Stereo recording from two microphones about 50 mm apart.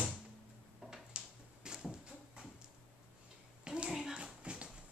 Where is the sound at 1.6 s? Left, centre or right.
Centre.